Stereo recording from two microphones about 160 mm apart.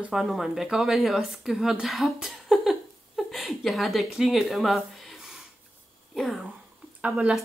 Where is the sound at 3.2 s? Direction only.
Centre (ahead or behind).